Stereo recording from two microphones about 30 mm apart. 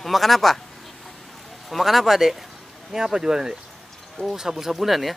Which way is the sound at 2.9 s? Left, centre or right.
Right.